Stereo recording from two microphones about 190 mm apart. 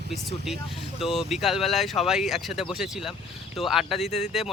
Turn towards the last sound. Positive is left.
turn(degrees=0)  # may be behind; listen again after turning